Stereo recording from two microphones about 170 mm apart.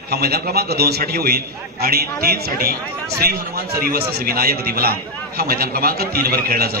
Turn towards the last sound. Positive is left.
turn(degrees=-65)  # may be behind; listen again after turning